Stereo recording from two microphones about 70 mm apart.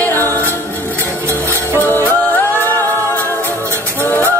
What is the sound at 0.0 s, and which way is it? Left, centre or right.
Music, left.